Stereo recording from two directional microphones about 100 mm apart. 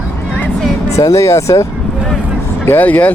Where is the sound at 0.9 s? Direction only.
30° left (ahead or behind).